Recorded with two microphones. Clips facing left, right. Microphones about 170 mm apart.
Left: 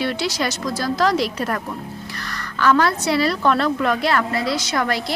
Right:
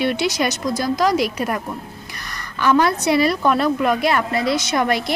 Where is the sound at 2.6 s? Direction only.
15° right (ahead or behind).